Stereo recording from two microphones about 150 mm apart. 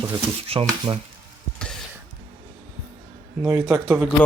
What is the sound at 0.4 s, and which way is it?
Speech, 40° right (ahead or behind).